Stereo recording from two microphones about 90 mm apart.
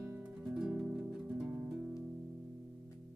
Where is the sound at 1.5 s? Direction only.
25° right (ahead or behind).